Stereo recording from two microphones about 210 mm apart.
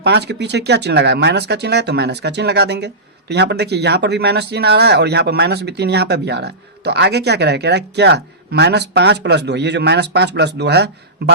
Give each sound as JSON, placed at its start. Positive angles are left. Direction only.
{"t": 0.0, "sound": "speech", "side_deg": -50}